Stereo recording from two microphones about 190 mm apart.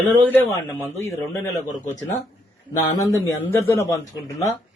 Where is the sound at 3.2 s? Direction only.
15° left (ahead or behind).